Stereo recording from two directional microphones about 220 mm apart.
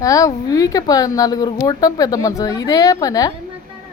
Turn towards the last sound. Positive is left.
turn(degrees=15)  # may be behind; listen again after turning